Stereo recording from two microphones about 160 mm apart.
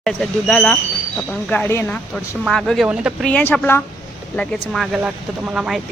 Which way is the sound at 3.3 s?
10° left (ahead or behind).